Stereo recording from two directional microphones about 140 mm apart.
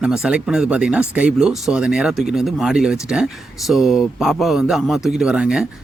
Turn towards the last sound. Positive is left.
turn(degrees=-5)  # may be behind; listen again after turning